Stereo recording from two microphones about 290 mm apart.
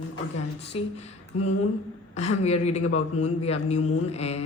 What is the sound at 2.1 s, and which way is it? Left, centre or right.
A man's voice, left.